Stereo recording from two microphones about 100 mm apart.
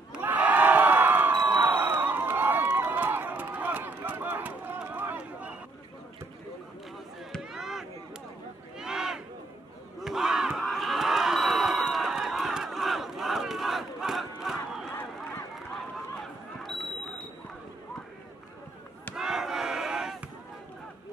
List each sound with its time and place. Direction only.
0.2 s crowd: 15° right (ahead or behind)
1.4 s run: 20° right (ahead or behind)
7.3 s chop: centre (ahead or behind)
8.7 s a sound: 5° right (ahead or behind)
9.9 s battle cry: 5° right (ahead or behind)
15.7 s a sound: 5° left (ahead or behind)
19.1 s battle cry: 5° right (ahead or behind)